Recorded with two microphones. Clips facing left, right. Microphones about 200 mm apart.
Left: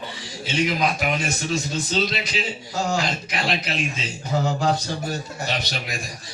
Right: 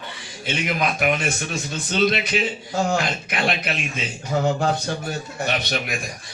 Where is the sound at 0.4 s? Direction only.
55° right (ahead or behind).